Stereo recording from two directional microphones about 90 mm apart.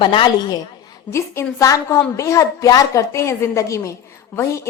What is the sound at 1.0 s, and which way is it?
A woman's voice, 30° left (ahead or behind).